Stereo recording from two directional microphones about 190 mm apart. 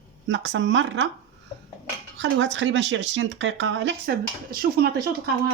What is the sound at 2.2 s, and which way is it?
Speech, 70° right (ahead or behind).